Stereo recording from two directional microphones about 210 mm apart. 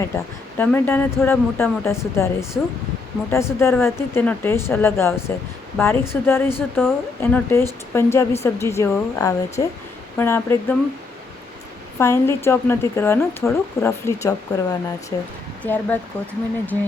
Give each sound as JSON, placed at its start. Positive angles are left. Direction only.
{"t": 0.1, "sound": "a woman's voice", "side_deg": 15}
{"t": 11.9, "sound": "a woman's voice", "side_deg": 10}